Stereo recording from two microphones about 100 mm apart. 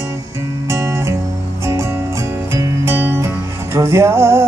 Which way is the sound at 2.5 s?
25° right (ahead or behind).